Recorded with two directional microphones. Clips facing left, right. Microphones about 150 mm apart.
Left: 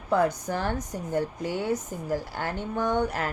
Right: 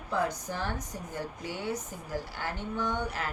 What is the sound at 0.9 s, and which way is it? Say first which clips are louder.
Speech: left 9 dB; 45° left (ahead or behind).